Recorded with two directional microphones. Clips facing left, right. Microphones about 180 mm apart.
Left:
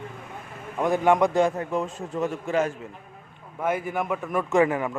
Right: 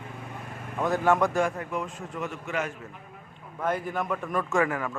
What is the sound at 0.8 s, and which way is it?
A man's voice, 15° left (ahead or behind).